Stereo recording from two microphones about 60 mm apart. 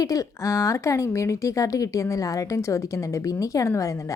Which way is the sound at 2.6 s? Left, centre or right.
Left.